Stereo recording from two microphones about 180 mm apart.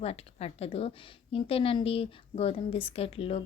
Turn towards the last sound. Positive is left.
turn(degrees=35)  # may be behind; listen again after turning